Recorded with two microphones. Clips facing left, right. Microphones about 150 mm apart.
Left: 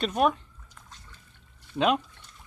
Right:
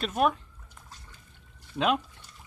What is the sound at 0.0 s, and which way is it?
Speech, centre (ahead or behind).